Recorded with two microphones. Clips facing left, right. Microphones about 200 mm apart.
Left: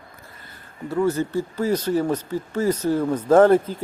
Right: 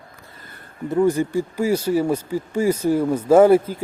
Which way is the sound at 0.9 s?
15° right (ahead or behind).